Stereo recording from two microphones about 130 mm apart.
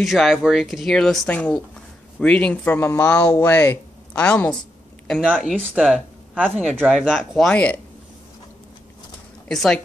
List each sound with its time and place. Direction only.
0.0 s speech: centre (ahead or behind)
5.2 s speech: 10° right (ahead or behind)
6.4 s speech: 5° left (ahead or behind)
6.8 s speech: 5° right (ahead or behind)
9.5 s speech: 5° left (ahead or behind)